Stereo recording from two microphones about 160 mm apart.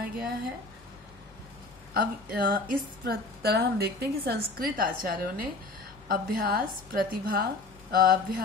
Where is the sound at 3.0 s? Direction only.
85° right; by 7.4 s 65° right (ahead or behind).